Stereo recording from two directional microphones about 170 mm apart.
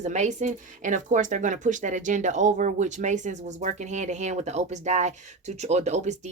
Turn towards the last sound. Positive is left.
turn(degrees=-40)  # may be behind; listen again after turning